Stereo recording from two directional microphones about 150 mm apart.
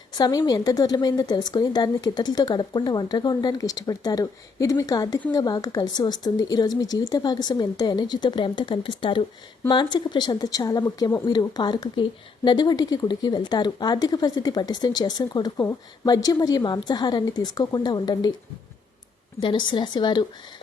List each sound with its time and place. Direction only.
0.2 s a woman's voice: 25° left (ahead or behind)
19.4 s a woman's voice: 30° left (ahead or behind)